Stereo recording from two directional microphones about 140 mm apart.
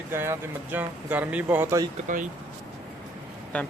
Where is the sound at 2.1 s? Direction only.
65° right (ahead or behind).